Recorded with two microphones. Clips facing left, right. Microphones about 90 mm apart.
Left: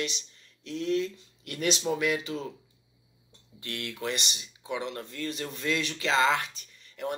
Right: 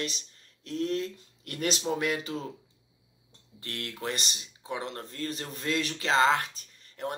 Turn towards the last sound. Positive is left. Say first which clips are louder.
# left 1 dB
turn(degrees=-40)  # may be behind; listen again after turning